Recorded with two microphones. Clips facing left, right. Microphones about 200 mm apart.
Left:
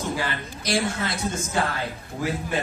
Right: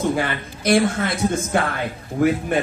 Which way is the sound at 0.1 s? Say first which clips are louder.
Right 6 dB; 55° right (ahead or behind).